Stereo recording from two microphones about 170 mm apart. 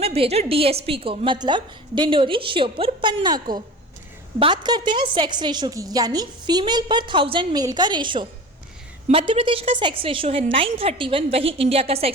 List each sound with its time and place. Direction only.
0.0 s a woman's voice: 35° right (ahead or behind)